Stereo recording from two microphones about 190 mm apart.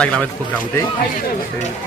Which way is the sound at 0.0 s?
5° left (ahead or behind).